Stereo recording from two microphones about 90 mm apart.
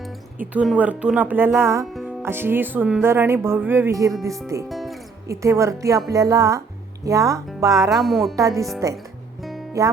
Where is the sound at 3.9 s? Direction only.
35° right (ahead or behind).